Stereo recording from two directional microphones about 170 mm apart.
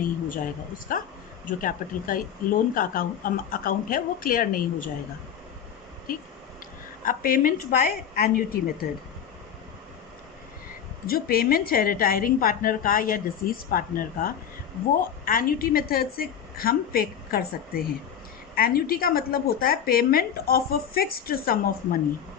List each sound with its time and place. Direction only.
0.0 s speech: 55° left (ahead or behind)
7.0 s speech: 55° left (ahead or behind)
11.0 s speech: 60° left (ahead or behind)